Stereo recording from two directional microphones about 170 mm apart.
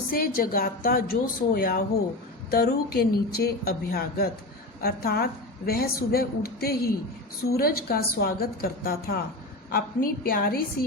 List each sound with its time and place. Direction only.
0.1 s a woman's voice: 60° left (ahead or behind)